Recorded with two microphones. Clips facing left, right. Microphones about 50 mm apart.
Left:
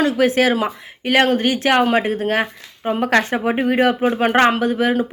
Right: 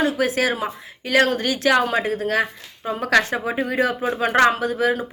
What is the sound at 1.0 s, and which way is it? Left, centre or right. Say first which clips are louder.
Speech: left 3 dB; left.